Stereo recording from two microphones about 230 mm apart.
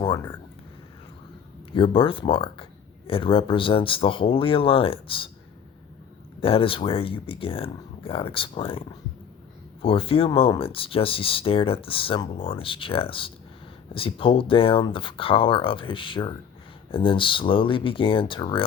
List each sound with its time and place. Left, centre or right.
0.0 s a sound: centre
1.7 s speech: left
6.4 s speech: left
9.8 s speech: left